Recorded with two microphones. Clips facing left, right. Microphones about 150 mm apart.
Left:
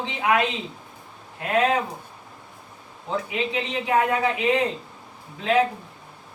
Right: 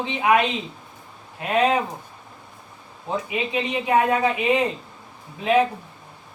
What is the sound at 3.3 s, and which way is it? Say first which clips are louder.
Speech: right 2 dB; 20° right (ahead or behind).